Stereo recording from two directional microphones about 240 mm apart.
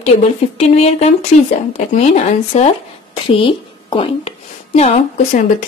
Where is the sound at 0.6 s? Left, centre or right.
Left.